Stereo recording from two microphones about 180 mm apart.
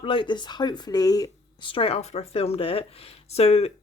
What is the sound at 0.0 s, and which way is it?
Speech, 30° left (ahead or behind).